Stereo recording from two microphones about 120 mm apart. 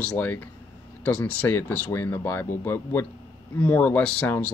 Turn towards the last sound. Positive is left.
turn(degrees=10)  # may be behind; listen again after turning